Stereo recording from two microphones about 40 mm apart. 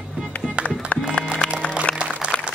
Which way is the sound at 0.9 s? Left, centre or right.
Left.